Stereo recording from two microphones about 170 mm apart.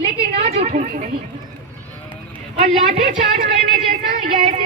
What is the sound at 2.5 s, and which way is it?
Speech, 35° right (ahead or behind).